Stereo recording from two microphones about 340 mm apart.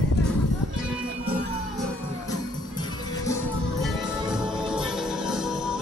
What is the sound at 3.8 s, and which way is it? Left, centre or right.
Music, centre.